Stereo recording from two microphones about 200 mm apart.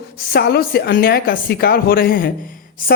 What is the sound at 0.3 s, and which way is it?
A woman's voice, 50° left (ahead or behind).